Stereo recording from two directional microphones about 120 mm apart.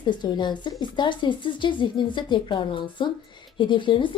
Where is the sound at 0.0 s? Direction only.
40° left (ahead or behind).